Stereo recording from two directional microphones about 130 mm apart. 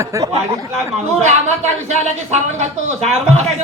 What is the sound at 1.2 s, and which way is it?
Speech, 60° right (ahead or behind).